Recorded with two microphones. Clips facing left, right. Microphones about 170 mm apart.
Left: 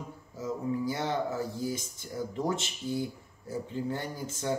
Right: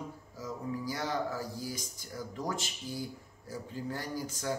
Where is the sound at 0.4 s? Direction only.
25° left (ahead or behind).